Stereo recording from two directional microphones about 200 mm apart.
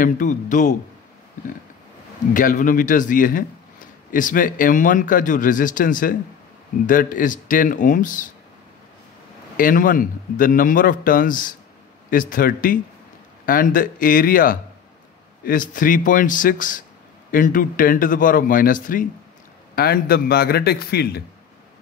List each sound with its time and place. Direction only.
0.0 s speech: 40° left (ahead or behind)
2.3 s a man's voice: 40° left (ahead or behind)
9.6 s a man's voice: 45° left (ahead or behind)